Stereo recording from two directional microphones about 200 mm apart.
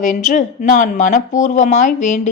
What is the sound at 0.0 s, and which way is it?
Speech, 40° left (ahead or behind).